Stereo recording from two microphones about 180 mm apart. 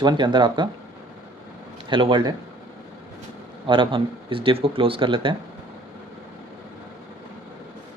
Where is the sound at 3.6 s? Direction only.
30° right (ahead or behind).